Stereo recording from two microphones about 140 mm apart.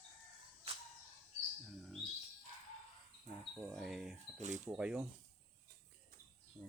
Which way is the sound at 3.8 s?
5° right (ahead or behind).